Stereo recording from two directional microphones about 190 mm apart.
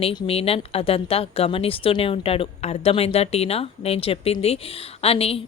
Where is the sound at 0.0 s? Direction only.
25° left (ahead or behind).